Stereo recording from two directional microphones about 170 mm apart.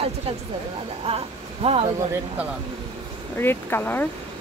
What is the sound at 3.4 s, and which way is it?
Speech, 15° left (ahead or behind).